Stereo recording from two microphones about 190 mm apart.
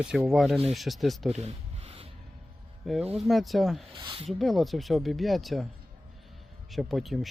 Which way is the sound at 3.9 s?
25° right (ahead or behind).